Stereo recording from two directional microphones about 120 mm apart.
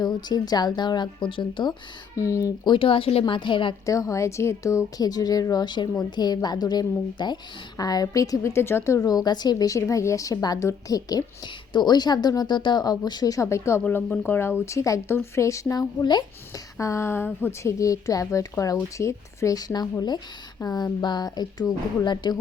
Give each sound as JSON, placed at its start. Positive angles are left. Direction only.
{"t": 0.0, "sound": "speech", "side_deg": 35}
{"t": 2.1, "sound": "speech", "side_deg": 25}
{"t": 2.6, "sound": "a woman's voice", "side_deg": 50}
{"t": 3.8, "sound": "speech", "side_deg": 25}
{"t": 13.8, "sound": "speech", "side_deg": 15}
{"t": 16.7, "sound": "speech", "side_deg": 25}